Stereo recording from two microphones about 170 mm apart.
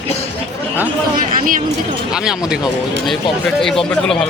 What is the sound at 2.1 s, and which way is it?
Speech, 5° right (ahead or behind).